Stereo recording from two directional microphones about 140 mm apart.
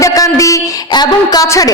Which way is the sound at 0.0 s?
25° left (ahead or behind).